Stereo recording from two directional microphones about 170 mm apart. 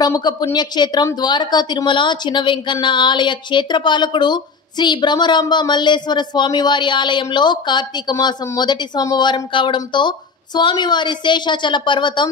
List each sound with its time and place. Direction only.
0.0 s a woman's voice: 25° left (ahead or behind)